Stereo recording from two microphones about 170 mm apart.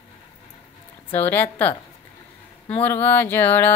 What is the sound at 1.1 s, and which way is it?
Mantra, 10° left (ahead or behind).